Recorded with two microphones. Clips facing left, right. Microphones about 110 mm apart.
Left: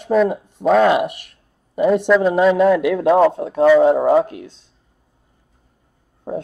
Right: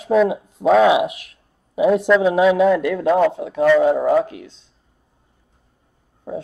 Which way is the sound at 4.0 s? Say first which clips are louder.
Left 2 dB; 15° left (ahead or behind).